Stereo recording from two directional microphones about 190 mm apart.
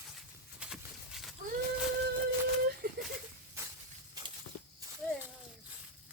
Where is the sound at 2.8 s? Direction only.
55° right (ahead or behind).